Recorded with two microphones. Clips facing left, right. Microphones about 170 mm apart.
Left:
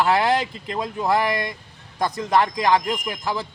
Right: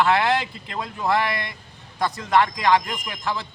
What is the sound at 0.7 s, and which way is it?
Speech, 20° left (ahead or behind).